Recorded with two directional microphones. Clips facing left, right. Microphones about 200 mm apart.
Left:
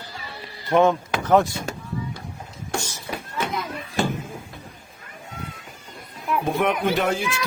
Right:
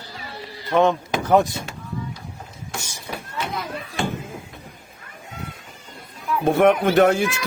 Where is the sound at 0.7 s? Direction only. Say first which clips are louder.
Even; 10° left (ahead or behind).